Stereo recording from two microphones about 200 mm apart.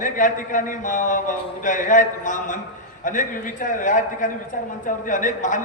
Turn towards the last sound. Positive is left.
turn(degrees=40)  # may be behind; listen again after turning